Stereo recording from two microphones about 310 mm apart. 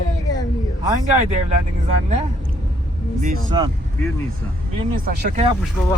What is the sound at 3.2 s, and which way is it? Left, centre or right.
Speech, centre.